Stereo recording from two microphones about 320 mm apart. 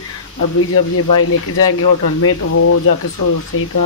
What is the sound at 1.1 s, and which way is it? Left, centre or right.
Speech, left.